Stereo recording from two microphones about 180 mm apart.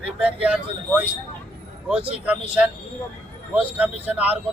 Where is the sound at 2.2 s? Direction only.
5° right (ahead or behind).